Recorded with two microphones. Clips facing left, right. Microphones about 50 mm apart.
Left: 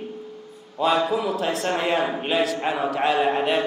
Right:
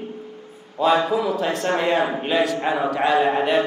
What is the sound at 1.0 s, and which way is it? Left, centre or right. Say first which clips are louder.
A man's voice: right 2 dB; centre.